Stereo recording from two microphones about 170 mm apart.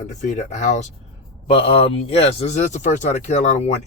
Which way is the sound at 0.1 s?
45° left (ahead or behind).